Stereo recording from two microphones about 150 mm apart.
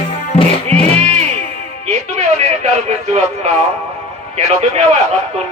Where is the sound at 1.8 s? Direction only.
45° right (ahead or behind).